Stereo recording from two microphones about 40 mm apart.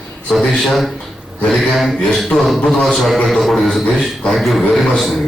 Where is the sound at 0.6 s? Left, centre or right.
Centre.